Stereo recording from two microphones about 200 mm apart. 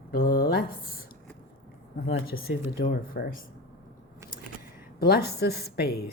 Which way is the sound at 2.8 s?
45° left (ahead or behind).